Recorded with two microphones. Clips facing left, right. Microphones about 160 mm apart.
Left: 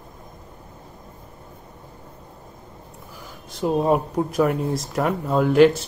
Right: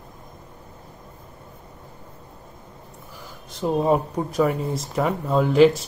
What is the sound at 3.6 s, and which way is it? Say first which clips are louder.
Speech: left 1 dB; centre (ahead or behind).